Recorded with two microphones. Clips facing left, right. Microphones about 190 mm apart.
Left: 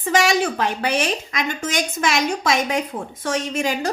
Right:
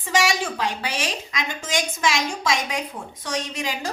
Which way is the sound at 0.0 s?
60° left (ahead or behind).